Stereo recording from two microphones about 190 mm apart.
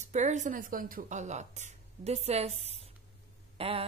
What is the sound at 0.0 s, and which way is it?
A woman's voice, 40° right (ahead or behind).